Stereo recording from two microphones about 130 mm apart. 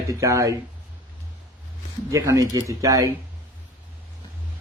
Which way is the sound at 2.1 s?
25° right (ahead or behind).